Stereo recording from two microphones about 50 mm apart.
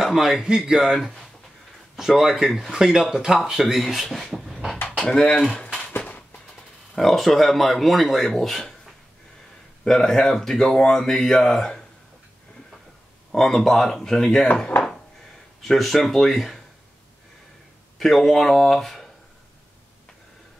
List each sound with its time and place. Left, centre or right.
0.0 s speech: centre
5.0 s speech: centre
5.9 s a sound: left
7.0 s a man's voice: centre
13.3 s speech: centre
15.6 s a man's voice: centre
17.9 s a man's voice: centre